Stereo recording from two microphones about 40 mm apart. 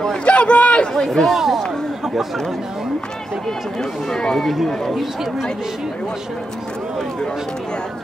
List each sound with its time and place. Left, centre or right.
0.2 s a sound: left
0.9 s speech: centre
1.2 s speech: centre
4.2 s speech: centre
4.5 s speech: centre